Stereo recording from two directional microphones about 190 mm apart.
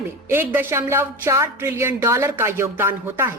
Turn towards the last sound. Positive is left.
turn(degrees=-10)  # may be behind; listen again after turning